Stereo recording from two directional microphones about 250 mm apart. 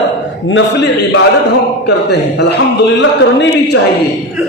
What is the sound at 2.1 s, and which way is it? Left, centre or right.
A man's voice, left.